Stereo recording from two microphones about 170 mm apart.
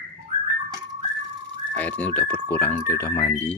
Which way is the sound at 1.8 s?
10° left (ahead or behind).